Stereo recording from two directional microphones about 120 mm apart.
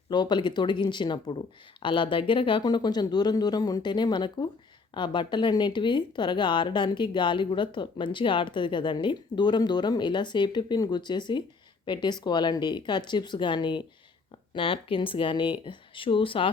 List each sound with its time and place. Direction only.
0.1 s speech: 40° left (ahead or behind)